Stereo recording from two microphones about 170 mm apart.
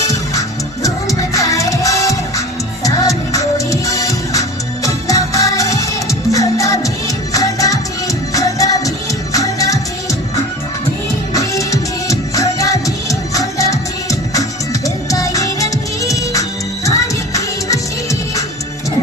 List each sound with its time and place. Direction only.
0.0 s music: 20° left (ahead or behind)
11.3 s music: 20° left (ahead or behind)